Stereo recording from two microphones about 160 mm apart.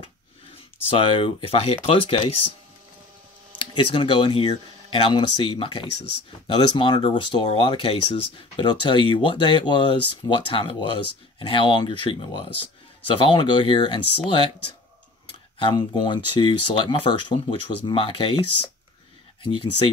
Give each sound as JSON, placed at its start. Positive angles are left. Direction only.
{"t": 0.8, "sound": "speech", "side_deg": 35}
{"t": 3.5, "sound": "speech", "side_deg": 30}